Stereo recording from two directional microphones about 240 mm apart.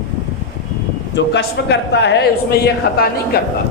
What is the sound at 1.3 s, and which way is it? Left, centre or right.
A man's voice, left.